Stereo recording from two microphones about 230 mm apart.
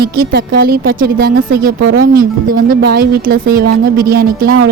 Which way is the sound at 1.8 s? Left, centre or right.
Right.